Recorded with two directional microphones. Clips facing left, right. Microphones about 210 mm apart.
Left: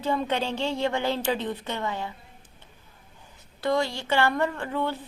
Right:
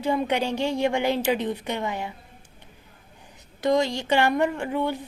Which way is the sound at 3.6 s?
20° right (ahead or behind).